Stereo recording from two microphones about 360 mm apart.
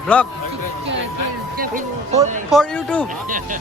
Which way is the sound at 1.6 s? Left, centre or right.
Right.